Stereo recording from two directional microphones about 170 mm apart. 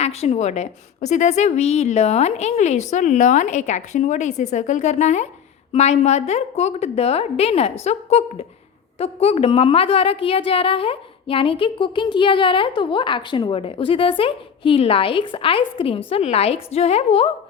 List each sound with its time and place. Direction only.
0.0 s a woman's voice: 40° left (ahead or behind)